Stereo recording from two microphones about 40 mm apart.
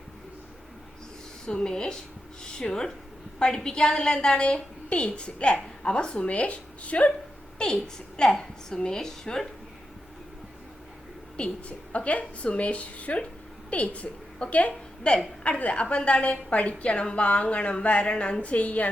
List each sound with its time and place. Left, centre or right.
1.5 s a woman's voice: centre
7.6 s a woman's voice: left
11.3 s a woman's voice: left
14.4 s a woman's voice: left